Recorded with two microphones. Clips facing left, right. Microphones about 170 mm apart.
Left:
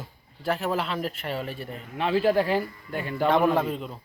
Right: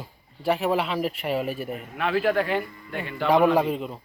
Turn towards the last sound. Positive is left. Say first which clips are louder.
# right 3 dB
turn(degrees=-5)  # may be behind; listen again after turning